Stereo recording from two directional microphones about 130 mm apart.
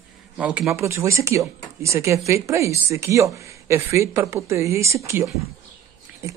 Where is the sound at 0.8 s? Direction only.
20° right (ahead or behind).